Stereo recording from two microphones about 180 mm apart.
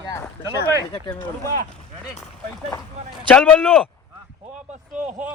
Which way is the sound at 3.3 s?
5° left (ahead or behind).